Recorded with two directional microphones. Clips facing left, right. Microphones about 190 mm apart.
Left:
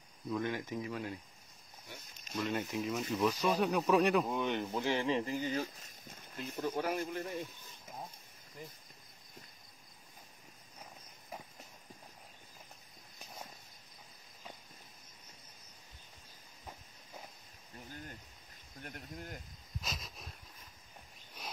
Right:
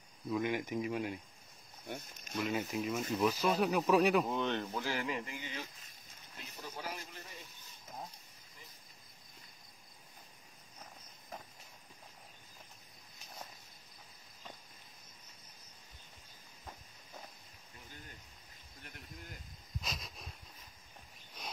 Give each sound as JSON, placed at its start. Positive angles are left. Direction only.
{"t": 0.4, "sound": "speech", "side_deg": -15}
{"t": 1.9, "sound": "speech", "side_deg": -55}
{"t": 2.3, "sound": "speech", "side_deg": 0}
{"t": 4.4, "sound": "speech", "side_deg": 15}
{"t": 18.8, "sound": "speech", "side_deg": 50}
{"t": 19.8, "sound": "a sound", "side_deg": 0}